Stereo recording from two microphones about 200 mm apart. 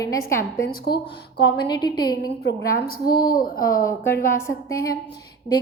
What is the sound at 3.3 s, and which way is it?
A woman's voice, 50° left (ahead or behind).